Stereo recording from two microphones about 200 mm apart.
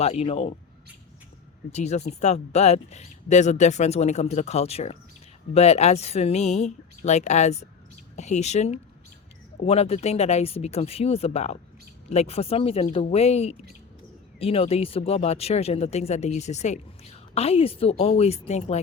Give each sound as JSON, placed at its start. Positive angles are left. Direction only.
{"t": 0.0, "sound": "speech", "side_deg": 30}
{"t": 1.7, "sound": "speech", "side_deg": 35}